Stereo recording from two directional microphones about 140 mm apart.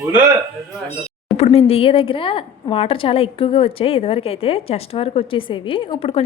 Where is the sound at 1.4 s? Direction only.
45° left (ahead or behind).